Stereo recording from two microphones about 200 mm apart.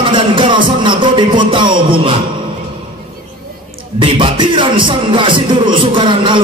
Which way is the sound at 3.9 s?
25° right (ahead or behind).